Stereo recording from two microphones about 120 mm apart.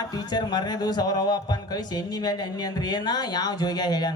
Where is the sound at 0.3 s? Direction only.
35° left (ahead or behind).